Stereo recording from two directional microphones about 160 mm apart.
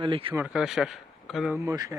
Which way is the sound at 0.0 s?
35° right (ahead or behind).